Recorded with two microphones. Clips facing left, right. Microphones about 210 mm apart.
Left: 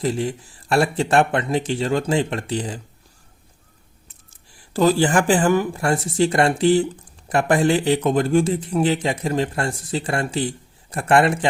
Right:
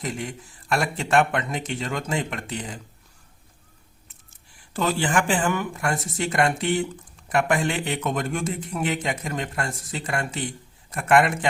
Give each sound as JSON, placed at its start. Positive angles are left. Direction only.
{"t": 0.0, "sound": "speech", "side_deg": 30}
{"t": 4.7, "sound": "speech", "side_deg": 35}